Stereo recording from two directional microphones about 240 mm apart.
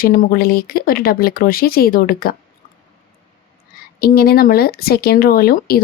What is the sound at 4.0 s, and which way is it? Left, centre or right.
Speech, left.